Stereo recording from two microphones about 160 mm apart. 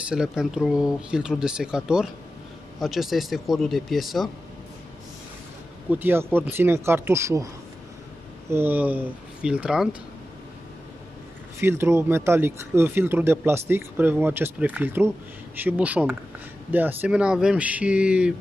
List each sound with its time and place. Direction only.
0.1 s speech: 5° right (ahead or behind)
5.9 s speech: 10° right (ahead or behind)
8.5 s speech: 15° right (ahead or behind)
11.6 s speech: 15° right (ahead or behind)